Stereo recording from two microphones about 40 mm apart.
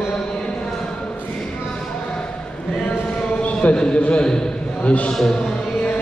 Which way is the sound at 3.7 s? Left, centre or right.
Left.